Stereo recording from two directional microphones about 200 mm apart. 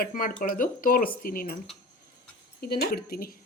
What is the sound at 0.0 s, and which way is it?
Speech, 45° left (ahead or behind).